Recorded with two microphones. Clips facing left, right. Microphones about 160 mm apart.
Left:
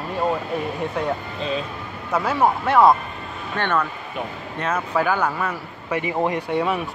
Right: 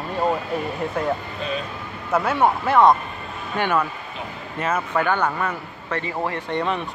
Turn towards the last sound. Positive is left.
turn(degrees=10)  # may be behind; listen again after turning